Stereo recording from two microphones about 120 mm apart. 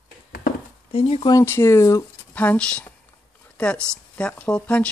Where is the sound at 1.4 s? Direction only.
20° left (ahead or behind).